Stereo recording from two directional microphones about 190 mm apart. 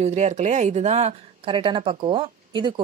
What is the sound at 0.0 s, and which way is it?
Speech, 40° right (ahead or behind).